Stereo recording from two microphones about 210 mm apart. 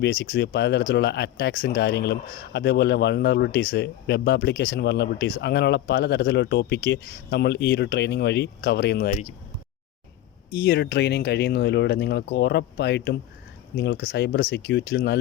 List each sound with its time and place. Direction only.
0.0 s speech: 50° left (ahead or behind)
10.5 s speech: 50° left (ahead or behind)